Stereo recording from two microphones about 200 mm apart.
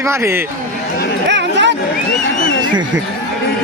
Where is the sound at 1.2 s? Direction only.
60° right (ahead or behind).